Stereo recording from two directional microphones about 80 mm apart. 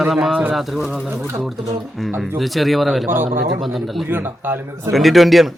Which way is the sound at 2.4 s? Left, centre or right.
Centre.